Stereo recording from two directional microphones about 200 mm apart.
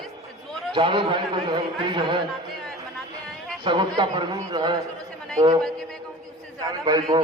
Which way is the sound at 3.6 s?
25° right (ahead or behind).